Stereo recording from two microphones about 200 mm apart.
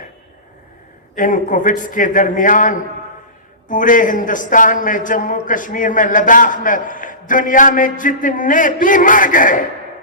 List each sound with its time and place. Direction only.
1.1 s a man's voice: 40° left (ahead or behind)